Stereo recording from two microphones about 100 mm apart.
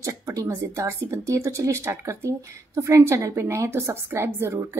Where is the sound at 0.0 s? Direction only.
35° right (ahead or behind).